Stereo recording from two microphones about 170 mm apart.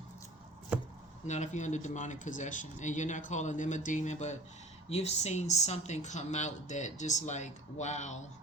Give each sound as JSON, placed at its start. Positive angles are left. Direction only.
{"t": 1.3, "sound": "speech", "side_deg": 45}